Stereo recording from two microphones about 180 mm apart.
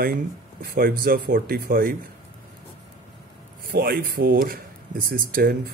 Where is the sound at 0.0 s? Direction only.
55° right (ahead or behind).